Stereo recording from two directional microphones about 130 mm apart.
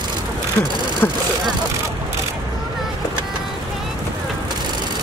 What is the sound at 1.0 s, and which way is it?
Speech, 15° left (ahead or behind).